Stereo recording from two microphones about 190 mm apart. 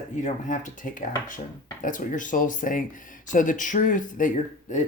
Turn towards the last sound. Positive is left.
turn(degrees=40)  # may be behind; listen again after turning